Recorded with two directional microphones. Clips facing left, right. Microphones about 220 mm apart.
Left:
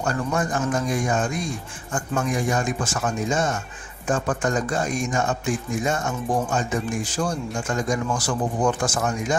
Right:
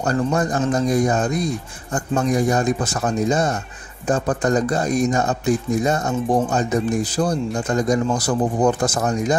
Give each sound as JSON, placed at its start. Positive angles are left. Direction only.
{"t": 0.0, "sound": "speech", "side_deg": -35}